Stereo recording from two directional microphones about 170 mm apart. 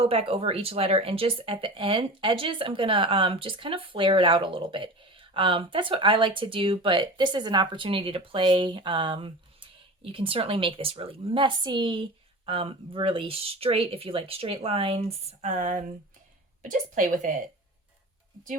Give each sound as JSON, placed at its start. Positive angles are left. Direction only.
{"t": 0.0, "sound": "a woman's voice", "side_deg": -35}